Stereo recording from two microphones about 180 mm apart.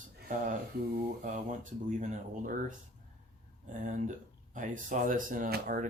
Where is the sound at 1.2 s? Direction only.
45° right (ahead or behind).